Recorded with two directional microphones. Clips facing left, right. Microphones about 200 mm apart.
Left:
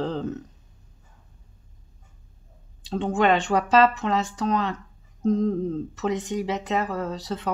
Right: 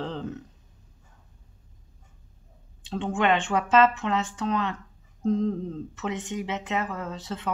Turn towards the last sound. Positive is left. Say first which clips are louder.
# left 4 dB
turn(degrees=40)  # may be behind; listen again after turning